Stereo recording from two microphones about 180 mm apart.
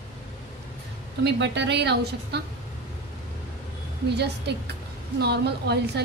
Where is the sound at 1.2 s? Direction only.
70° right (ahead or behind).